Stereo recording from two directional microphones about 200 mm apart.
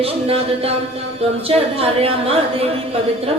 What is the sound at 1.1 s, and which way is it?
A woman's voice, 30° right (ahead or behind).